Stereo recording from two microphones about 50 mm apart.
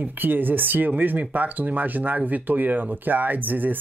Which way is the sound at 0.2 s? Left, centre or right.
Right.